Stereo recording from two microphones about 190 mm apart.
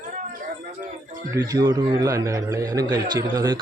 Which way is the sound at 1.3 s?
20° right (ahead or behind).